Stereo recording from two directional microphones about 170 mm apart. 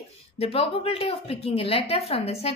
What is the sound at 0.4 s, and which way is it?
A woman's voice, 35° left (ahead or behind).